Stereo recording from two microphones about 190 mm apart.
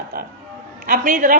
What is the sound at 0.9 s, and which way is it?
Speech, 45° right (ahead or behind).